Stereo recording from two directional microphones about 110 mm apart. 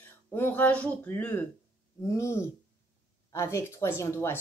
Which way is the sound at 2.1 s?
25° left (ahead or behind).